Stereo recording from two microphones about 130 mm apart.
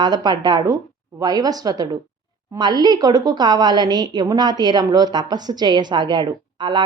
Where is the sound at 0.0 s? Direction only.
30° right (ahead or behind).